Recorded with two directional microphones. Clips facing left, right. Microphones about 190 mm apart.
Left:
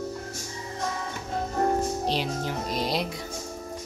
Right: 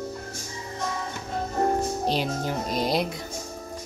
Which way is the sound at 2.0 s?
45° right (ahead or behind).